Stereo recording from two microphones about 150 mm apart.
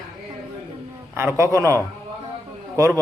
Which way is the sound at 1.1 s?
20° right (ahead or behind).